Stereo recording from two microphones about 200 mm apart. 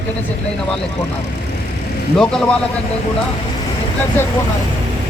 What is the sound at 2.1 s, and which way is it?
Speech, 5° left (ahead or behind).